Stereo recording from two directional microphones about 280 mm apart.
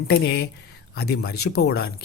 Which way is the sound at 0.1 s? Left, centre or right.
Left.